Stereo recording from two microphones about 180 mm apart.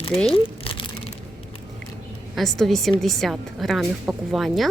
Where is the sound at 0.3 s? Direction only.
30° left (ahead or behind).